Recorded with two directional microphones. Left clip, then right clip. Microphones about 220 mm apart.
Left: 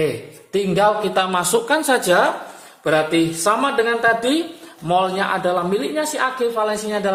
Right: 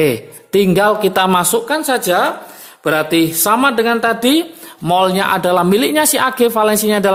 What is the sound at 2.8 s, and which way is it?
A man's voice, 40° right (ahead or behind).